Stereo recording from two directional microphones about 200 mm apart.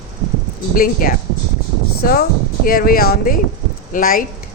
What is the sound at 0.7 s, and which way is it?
A woman's voice, 45° left (ahead or behind).